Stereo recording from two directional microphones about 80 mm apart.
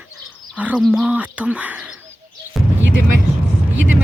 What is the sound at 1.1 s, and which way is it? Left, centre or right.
Speech, centre.